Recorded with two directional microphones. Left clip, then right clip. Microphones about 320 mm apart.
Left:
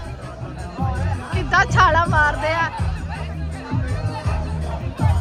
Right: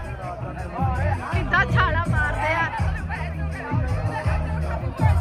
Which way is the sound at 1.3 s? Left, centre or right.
Centre.